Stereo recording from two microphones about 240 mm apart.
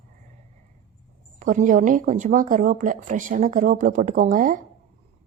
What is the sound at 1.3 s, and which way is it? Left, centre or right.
Speech, right.